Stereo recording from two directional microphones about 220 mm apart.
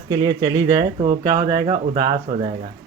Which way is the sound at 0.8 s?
35° right (ahead or behind).